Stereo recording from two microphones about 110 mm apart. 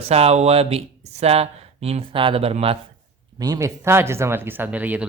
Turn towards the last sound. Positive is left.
turn(degrees=-15)  # may be behind; listen again after turning